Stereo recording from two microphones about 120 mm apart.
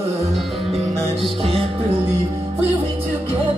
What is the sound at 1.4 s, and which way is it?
Music, 50° right (ahead or behind).